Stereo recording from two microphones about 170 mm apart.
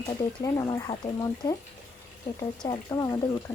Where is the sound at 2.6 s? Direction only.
20° left (ahead or behind).